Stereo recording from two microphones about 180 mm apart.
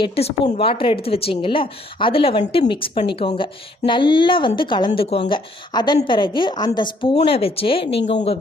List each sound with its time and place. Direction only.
0.0 s a woman's voice: 35° left (ahead or behind)